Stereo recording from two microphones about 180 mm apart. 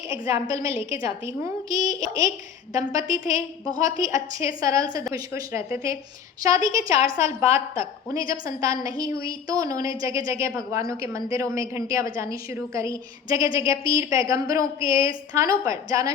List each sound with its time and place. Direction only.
0.1 s a woman's voice: 15° right (ahead or behind)